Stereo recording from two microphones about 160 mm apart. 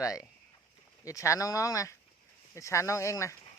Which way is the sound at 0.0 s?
20° left (ahead or behind).